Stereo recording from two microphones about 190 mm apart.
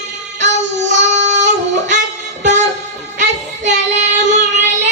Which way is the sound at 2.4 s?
40° right (ahead or behind).